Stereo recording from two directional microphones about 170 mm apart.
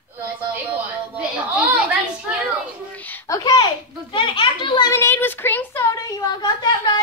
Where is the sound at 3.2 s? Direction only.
20° left (ahead or behind).